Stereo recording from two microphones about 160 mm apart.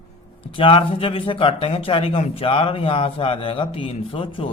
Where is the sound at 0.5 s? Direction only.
35° left (ahead or behind).